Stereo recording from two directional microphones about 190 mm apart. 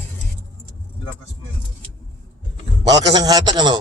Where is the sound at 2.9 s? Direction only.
20° right (ahead or behind).